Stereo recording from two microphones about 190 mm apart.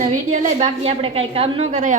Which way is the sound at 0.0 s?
40° right (ahead or behind).